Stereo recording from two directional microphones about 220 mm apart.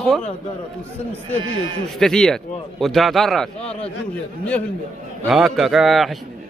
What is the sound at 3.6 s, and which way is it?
Speech, 25° left (ahead or behind).